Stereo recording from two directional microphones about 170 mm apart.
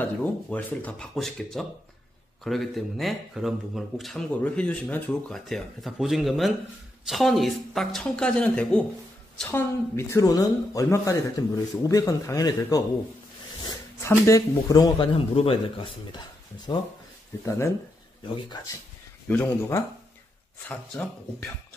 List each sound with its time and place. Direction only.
0.0 s speech: 10° left (ahead or behind)
19.2 s speech: 10° left (ahead or behind)